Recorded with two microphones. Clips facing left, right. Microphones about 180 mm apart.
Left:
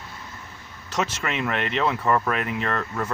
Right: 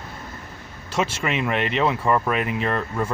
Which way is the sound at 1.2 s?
10° right (ahead or behind).